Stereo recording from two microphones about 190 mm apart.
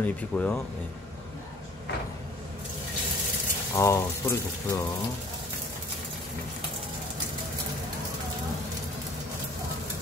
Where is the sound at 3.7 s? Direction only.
15° left (ahead or behind).